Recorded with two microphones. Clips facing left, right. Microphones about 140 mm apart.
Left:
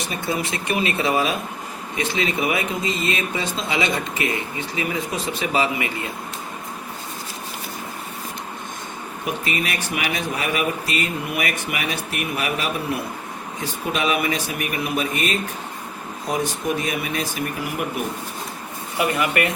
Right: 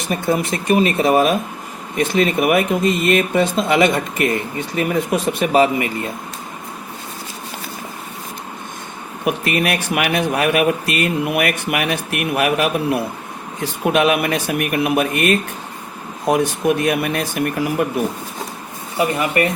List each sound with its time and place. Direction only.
0.1 s speech: 45° right (ahead or behind)
9.2 s a man's voice: 60° right (ahead or behind)
13.8 s a man's voice: 60° right (ahead or behind)
18.9 s speech: 30° right (ahead or behind)